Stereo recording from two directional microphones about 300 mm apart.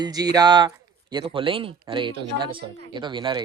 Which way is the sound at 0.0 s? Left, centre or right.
Centre.